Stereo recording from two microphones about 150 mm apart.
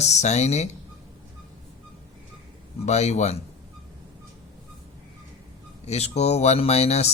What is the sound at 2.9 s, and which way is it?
Speech, 50° left (ahead or behind).